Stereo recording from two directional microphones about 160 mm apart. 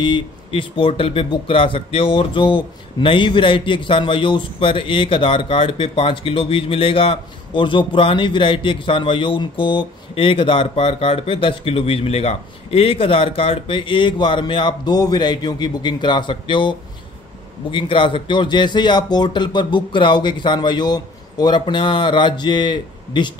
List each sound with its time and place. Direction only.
0.0 s a man's voice: 30° left (ahead or behind)